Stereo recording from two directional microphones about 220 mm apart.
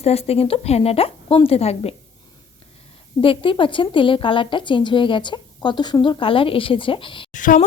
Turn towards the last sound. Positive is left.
turn(degrees=35)  # may be behind; listen again after turning